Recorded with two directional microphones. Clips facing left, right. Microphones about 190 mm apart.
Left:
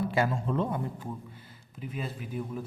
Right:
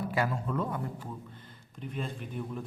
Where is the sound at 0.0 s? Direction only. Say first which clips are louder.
Left 3 dB; 25° left (ahead or behind).